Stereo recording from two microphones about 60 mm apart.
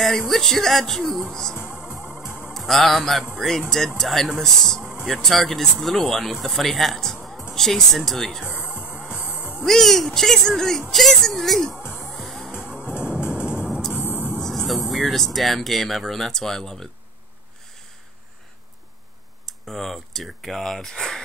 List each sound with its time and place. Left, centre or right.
0.3 s speech: centre
1.6 s music: centre
2.5 s speech: centre
8.5 s music: centre
9.7 s speech: centre
12.1 s music: centre
12.4 s music: centre
13.9 s vehicle: left
14.9 s speech: centre
19.4 s speech: centre